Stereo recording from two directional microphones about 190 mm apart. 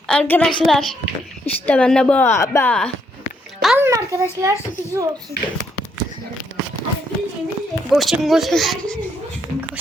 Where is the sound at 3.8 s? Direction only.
15° right (ahead or behind).